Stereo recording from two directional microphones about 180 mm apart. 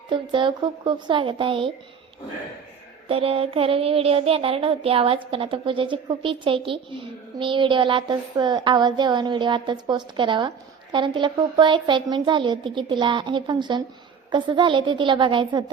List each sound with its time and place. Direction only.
0.1 s speech: 25° right (ahead or behind)
3.1 s child singing: 30° right (ahead or behind)
7.3 s speech: 25° right (ahead or behind)